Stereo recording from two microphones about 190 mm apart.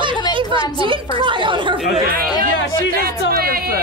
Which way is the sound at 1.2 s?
25° right (ahead or behind).